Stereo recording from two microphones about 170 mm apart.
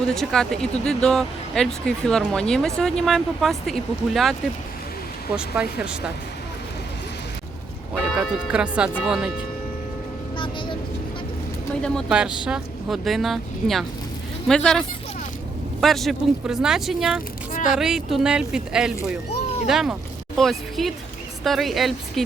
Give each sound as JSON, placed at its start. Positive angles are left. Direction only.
{"t": 0.0, "sound": "speech", "side_deg": 5}
{"t": 8.5, "sound": "speech", "side_deg": -5}
{"t": 10.3, "sound": "music", "side_deg": 30}
{"t": 11.8, "sound": "speech", "side_deg": 0}
{"t": 17.5, "sound": "a sound", "side_deg": 50}
{"t": 17.7, "sound": "speech", "side_deg": -5}
{"t": 19.3, "sound": "a sound", "side_deg": 40}
{"t": 19.6, "sound": "speech", "side_deg": -5}